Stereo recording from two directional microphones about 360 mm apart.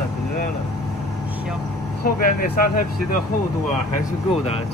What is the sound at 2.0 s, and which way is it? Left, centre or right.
Speech, left.